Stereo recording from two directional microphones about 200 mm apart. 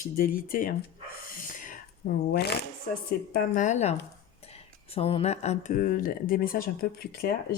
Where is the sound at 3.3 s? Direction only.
40° left (ahead or behind).